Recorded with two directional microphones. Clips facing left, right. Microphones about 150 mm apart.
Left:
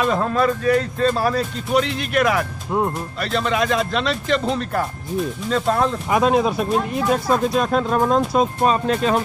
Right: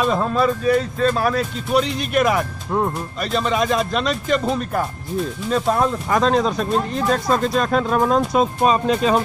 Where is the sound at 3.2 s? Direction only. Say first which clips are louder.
Right 1 dB; 5° right (ahead or behind).